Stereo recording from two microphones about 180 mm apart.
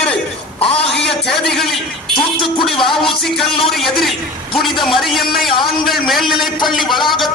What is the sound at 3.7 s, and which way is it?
A man's voice, centre (ahead or behind).